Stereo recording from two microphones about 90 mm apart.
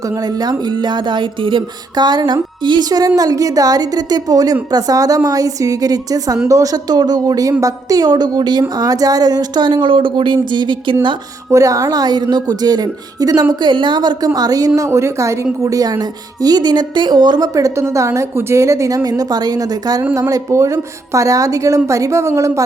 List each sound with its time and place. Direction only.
0.3 s music: 50° right (ahead or behind)
3.2 s a woman's voice: 40° right (ahead or behind)
8.8 s music: 45° right (ahead or behind)
11.5 s a woman's voice: 40° right (ahead or behind)
13.5 s music: 60° right (ahead or behind)
14.3 s a woman's voice: 45° right (ahead or behind)
14.8 s a woman's voice: 30° right (ahead or behind)